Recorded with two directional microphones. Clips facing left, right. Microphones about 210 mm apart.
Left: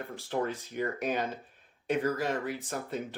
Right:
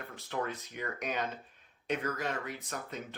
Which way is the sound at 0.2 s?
35° left (ahead or behind).